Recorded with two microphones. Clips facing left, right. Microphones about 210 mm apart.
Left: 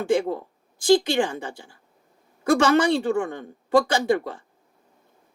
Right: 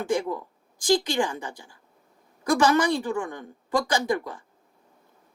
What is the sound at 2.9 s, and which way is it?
Speech, 65° left (ahead or behind).